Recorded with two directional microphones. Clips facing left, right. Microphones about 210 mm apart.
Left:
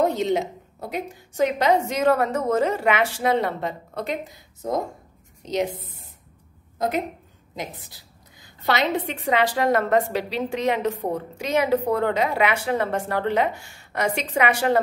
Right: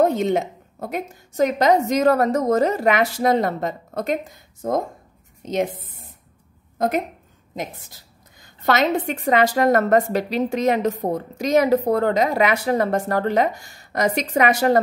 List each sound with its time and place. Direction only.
0.0 s a woman's voice: 50° right (ahead or behind)
7.5 s a woman's voice: 50° right (ahead or behind)